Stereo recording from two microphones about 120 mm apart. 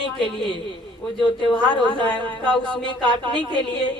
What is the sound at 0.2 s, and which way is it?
A man's voice, 45° left (ahead or behind).